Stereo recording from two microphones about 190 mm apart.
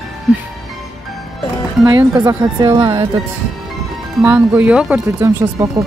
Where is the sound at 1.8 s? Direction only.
20° right (ahead or behind).